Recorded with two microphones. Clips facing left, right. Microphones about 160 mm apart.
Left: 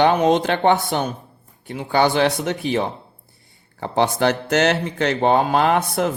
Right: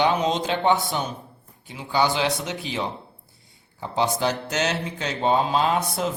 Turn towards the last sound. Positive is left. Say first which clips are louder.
# left 5 dB
turn(degrees=60)  # may be behind; listen again after turning